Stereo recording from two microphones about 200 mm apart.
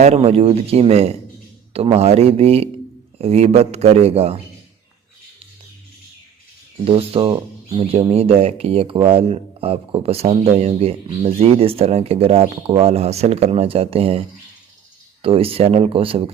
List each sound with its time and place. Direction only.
0.0 s speech: 30° right (ahead or behind)
6.9 s speech: 25° right (ahead or behind)